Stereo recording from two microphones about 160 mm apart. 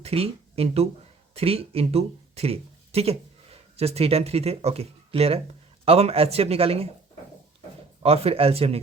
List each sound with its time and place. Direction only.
0.0 s speech: 40° right (ahead or behind)
8.0 s speech: 40° right (ahead or behind)